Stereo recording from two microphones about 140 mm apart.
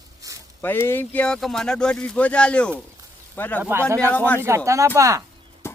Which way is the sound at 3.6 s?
15° right (ahead or behind).